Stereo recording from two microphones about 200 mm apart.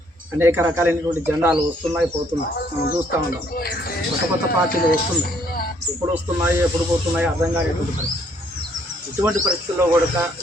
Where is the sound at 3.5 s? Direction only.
50° left (ahead or behind).